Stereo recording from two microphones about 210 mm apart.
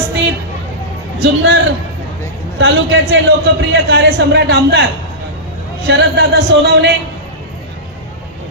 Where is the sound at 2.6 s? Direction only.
60° right (ahead or behind).